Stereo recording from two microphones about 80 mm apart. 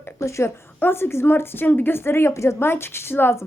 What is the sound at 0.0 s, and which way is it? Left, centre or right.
Speech, left.